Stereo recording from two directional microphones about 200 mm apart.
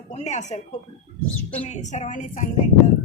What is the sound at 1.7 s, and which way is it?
Speech, 35° left (ahead or behind).